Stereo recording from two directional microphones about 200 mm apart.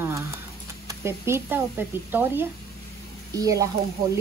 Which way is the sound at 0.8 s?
15° right (ahead or behind).